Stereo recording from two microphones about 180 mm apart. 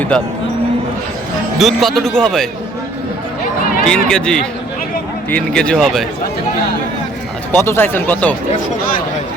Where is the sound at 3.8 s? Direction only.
5° left (ahead or behind).